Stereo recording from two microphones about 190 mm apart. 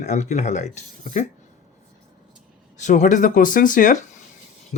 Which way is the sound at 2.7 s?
40° left (ahead or behind).